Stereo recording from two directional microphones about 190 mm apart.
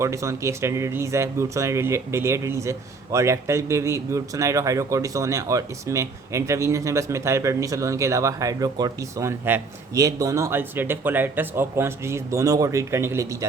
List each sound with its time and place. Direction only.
0.0 s speech: 15° right (ahead or behind)